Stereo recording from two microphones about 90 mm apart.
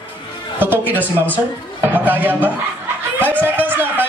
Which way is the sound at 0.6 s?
20° right (ahead or behind).